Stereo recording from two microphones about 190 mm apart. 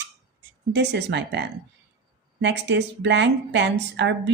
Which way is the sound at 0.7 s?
65° right (ahead or behind).